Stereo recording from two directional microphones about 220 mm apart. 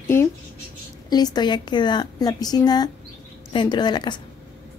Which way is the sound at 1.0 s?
20° left (ahead or behind).